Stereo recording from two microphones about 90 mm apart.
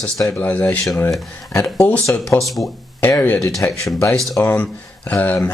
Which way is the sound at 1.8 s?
15° left (ahead or behind).